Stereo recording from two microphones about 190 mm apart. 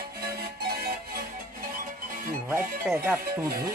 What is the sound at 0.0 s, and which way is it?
Music, 55° right (ahead or behind).